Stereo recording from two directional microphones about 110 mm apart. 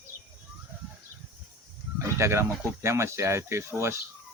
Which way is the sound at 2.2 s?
25° right (ahead or behind).